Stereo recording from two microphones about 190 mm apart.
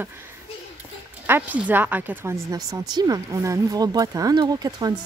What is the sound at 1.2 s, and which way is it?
Speech, 10° right (ahead or behind).